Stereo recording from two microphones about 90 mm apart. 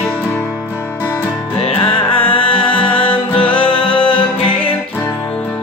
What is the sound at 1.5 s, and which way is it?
Music, 90° left.